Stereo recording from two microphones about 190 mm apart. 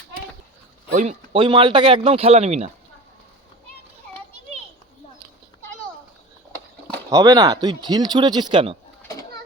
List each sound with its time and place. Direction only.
0.9 s speech: 35° right (ahead or behind)
7.1 s speech: 20° right (ahead or behind)
9.0 s children playing: 15° left (ahead or behind)